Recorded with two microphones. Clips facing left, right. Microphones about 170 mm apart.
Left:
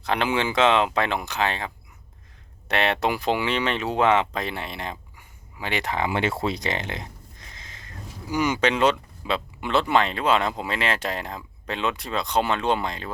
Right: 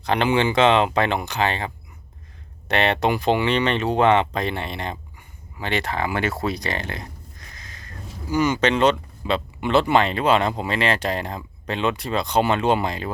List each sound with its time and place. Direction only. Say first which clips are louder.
0.0 s speech: right 4 dB; centre (ahead or behind)